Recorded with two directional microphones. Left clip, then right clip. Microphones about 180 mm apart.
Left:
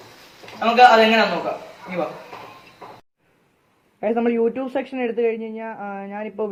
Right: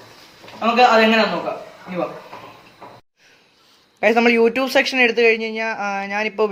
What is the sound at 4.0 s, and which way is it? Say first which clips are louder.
Speech: right 6 dB; 25° right (ahead or behind).